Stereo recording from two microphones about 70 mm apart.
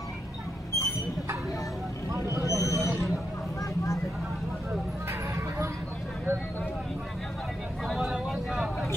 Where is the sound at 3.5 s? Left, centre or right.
Left.